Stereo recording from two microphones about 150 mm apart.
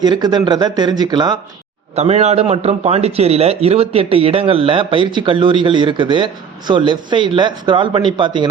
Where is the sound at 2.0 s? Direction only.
45° right (ahead or behind).